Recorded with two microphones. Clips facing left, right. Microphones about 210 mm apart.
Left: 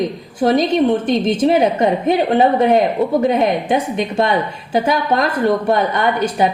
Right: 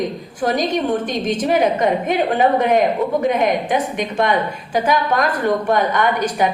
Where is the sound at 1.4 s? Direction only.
30° left (ahead or behind).